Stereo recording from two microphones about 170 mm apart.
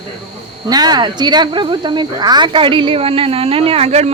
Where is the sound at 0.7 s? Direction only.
25° right (ahead or behind).